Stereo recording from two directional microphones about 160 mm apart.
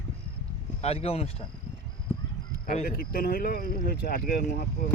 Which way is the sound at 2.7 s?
60° left (ahead or behind).